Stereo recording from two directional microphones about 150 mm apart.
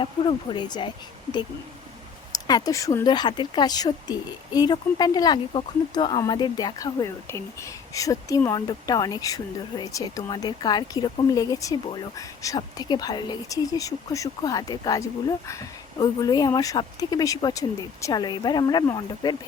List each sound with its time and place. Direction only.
0.0 s speech: 30° left (ahead or behind)
2.3 s speech: 25° left (ahead or behind)